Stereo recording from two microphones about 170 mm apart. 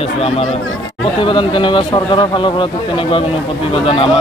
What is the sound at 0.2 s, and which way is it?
Speech, 35° left (ahead or behind).